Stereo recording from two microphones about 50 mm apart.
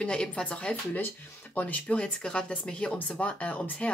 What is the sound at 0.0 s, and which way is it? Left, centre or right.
Speech, centre.